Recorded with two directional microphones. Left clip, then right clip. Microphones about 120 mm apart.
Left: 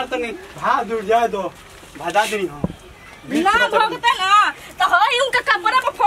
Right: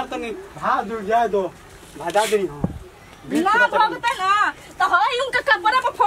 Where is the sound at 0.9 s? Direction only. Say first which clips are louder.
Left 2 dB; 20° left (ahead or behind).